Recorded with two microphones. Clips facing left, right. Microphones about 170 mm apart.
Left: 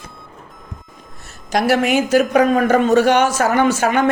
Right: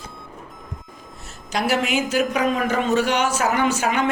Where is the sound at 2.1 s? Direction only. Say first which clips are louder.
Left 9 dB; 45° left (ahead or behind).